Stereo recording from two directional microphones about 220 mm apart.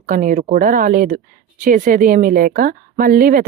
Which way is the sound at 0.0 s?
40° right (ahead or behind).